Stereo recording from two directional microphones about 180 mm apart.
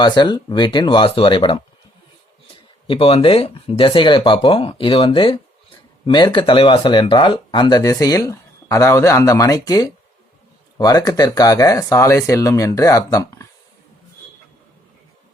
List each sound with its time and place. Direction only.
0.0 s speech: 25° left (ahead or behind)
2.8 s speech: 30° left (ahead or behind)